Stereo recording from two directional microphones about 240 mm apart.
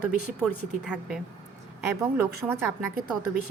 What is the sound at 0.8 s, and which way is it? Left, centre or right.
A woman's voice, centre.